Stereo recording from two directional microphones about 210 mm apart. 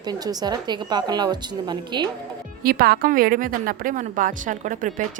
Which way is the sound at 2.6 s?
45° right (ahead or behind).